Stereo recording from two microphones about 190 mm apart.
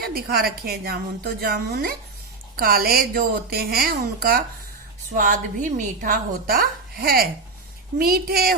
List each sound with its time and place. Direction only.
0.0 s a woman's voice: 50° right (ahead or behind)